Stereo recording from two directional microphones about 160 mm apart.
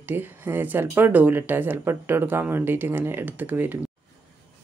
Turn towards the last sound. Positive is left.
turn(degrees=-10)  # may be behind; listen again after turning